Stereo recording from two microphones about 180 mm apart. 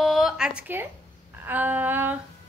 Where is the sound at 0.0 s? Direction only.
Centre (ahead or behind).